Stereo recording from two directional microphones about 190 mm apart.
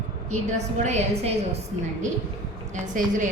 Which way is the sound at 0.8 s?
35° right (ahead or behind).